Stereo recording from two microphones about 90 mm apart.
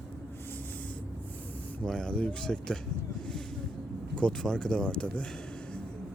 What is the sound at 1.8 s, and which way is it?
Speech, 10° left (ahead or behind).